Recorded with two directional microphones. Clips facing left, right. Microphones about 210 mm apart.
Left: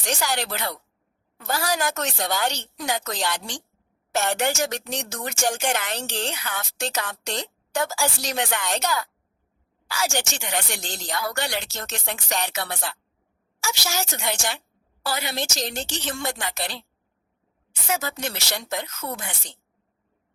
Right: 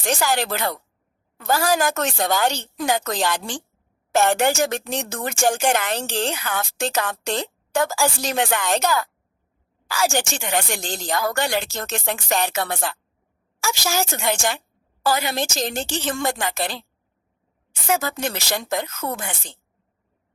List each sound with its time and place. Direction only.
0.0 s a woman's voice: 55° right (ahead or behind)
17.8 s a woman's voice: 50° right (ahead or behind)